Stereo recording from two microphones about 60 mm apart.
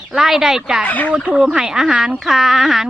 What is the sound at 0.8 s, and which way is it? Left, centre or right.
Speech, left.